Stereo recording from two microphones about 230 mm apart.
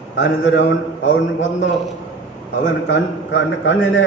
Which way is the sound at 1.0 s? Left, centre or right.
Left.